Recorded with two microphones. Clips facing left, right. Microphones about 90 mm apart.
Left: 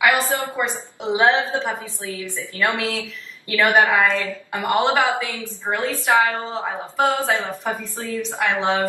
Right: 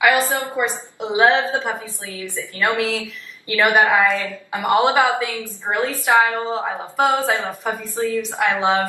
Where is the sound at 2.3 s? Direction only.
20° right (ahead or behind).